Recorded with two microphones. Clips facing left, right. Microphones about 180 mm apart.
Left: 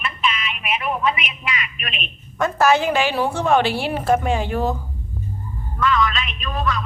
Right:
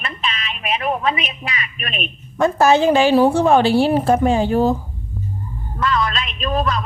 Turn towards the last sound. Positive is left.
turn(degrees=-35)  # may be behind; listen again after turning